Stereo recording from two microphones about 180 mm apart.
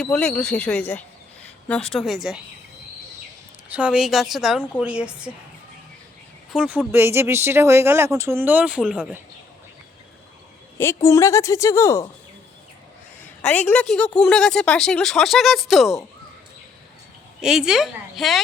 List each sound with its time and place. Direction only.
0.0 s a woman's voice: 5° left (ahead or behind)
3.8 s a woman's voice: 5° right (ahead or behind)
6.5 s speech: 5° right (ahead or behind)
10.8 s a woman's voice: 15° left (ahead or behind)
13.2 s a woman's voice: 10° left (ahead or behind)
17.4 s a woman's voice: 5° right (ahead or behind)